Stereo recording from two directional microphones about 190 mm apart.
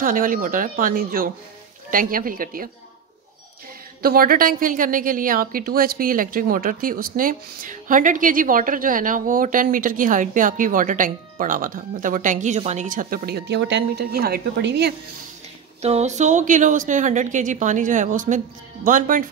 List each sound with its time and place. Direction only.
0.0 s a woman's voice: 45° right (ahead or behind)
4.0 s a woman's voice: 50° right (ahead or behind)
15.8 s a woman's voice: 35° right (ahead or behind)